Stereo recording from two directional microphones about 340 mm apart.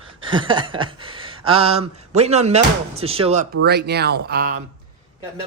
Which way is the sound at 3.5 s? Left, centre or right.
Right.